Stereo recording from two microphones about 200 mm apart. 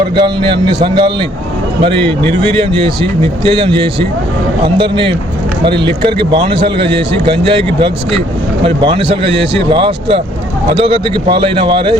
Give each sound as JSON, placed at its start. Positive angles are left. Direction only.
{"t": 0.2, "sound": "a man's voice", "side_deg": -25}